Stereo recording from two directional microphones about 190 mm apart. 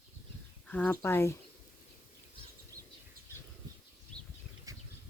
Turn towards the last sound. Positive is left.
turn(degrees=-20)  # may be behind; listen again after turning